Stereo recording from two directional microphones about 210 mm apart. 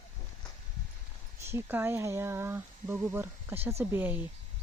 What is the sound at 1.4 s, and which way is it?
Speech, 10° right (ahead or behind).